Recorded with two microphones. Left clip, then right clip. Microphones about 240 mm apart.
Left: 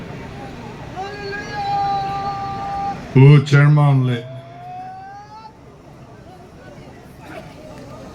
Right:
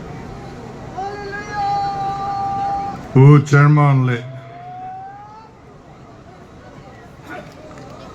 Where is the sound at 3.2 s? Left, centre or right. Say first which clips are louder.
Right 2 dB; right.